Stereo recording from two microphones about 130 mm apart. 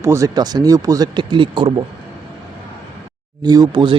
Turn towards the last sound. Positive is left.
turn(degrees=-35)  # may be behind; listen again after turning